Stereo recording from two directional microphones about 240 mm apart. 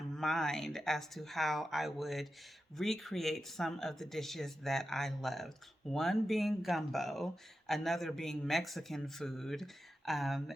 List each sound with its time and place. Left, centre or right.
0.1 s speech: centre